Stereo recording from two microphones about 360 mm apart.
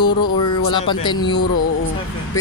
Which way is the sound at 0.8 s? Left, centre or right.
Centre.